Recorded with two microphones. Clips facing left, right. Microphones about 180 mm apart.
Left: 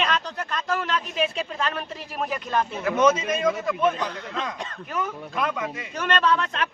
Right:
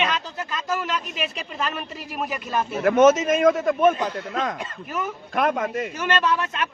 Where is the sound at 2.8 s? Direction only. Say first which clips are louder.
Right 6 dB; 50° right (ahead or behind).